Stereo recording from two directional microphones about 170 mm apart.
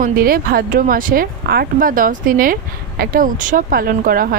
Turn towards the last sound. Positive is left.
turn(degrees=-55)  # may be behind; listen again after turning